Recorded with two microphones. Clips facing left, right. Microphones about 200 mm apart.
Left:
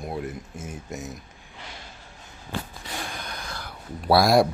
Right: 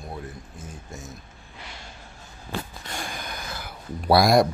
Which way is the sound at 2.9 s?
Centre (ahead or behind).